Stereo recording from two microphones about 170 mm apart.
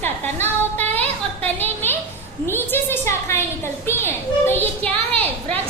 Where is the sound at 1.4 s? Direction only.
10° left (ahead or behind).